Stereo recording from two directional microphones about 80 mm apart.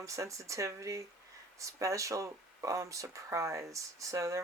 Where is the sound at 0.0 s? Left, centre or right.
Right.